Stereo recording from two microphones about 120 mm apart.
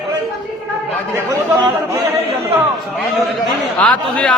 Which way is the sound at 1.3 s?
30° right (ahead or behind).